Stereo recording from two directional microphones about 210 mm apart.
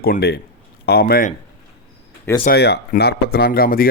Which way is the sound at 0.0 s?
45° left (ahead or behind).